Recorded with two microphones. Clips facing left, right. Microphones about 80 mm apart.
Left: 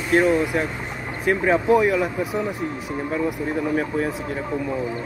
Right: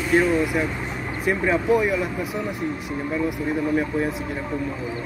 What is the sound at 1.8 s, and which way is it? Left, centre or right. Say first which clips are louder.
Speech: left 3 dB; left.